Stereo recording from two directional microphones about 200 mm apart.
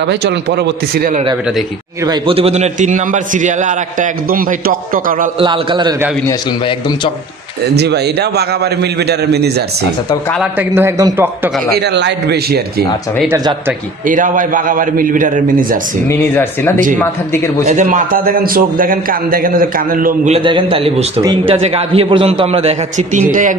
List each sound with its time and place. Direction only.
0.0 s a man's voice: 60° right (ahead or behind)
2.0 s a man's voice: 25° right (ahead or behind); by 5.3 s 45° right (ahead or behind)
5.4 s a man's voice: 25° right (ahead or behind)
7.7 s a man's voice: 55° right (ahead or behind)
10.3 s a man's voice: 5° right (ahead or behind)
11.7 s a man's voice: 60° right (ahead or behind)
13.3 s a man's voice: 10° right (ahead or behind)
14.0 s a man's voice: 40° right (ahead or behind)
16.3 s speech: 10° left (ahead or behind)
17.6 s a man's voice: 40° right (ahead or behind)
20.3 s a man's voice: 25° right (ahead or behind)
21.5 s a man's voice: 30° right (ahead or behind)